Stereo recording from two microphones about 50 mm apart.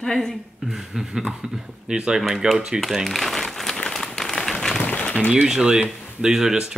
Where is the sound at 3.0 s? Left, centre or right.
Centre.